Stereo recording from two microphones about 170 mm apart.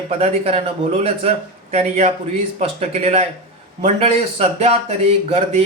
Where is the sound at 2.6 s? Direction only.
40° right (ahead or behind).